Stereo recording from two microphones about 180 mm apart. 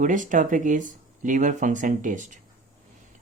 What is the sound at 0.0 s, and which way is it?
Speech, 45° right (ahead or behind).